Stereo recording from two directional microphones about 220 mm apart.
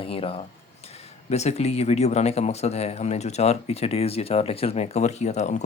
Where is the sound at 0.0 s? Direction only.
25° left (ahead or behind).